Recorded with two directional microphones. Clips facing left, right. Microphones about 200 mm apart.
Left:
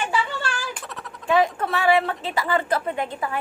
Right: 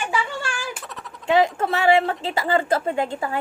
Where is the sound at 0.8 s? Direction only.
Centre (ahead or behind).